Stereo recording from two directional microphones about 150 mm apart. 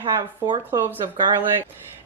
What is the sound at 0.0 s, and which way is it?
Speech, 30° right (ahead or behind).